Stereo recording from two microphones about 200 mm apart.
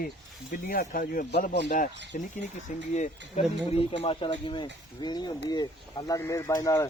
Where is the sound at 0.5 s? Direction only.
45° left (ahead or behind).